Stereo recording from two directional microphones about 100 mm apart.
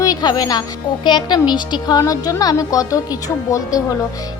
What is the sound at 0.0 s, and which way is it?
A woman's voice, 40° left (ahead or behind).